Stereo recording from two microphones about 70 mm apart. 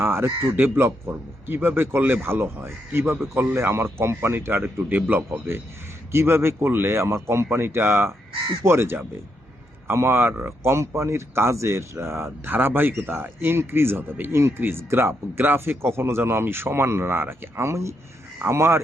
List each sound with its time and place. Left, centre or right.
0.0 s speech: right
6.1 s speech: right